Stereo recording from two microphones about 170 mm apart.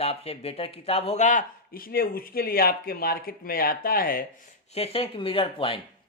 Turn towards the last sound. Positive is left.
turn(degrees=30)  # may be behind; listen again after turning